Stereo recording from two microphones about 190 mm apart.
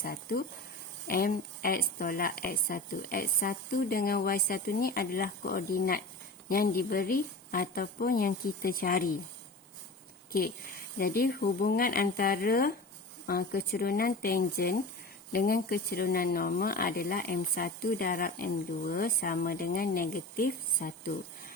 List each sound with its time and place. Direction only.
0.0 s speech: 50° left (ahead or behind)
10.9 s speech: 50° left (ahead or behind)